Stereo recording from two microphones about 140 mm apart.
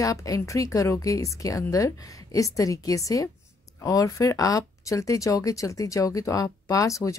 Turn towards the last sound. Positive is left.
turn(degrees=25)  # may be behind; listen again after turning